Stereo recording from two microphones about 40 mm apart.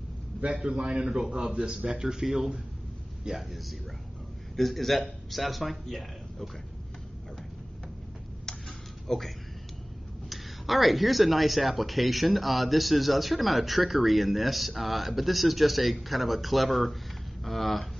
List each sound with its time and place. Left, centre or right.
0.5 s a man's voice: centre
8.5 s tick-tock: centre
9.0 s speech: centre
10.3 s speech: centre